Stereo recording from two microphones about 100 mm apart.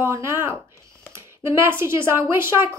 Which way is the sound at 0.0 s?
25° right (ahead or behind).